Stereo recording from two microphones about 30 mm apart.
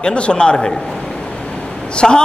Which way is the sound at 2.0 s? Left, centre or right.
Centre.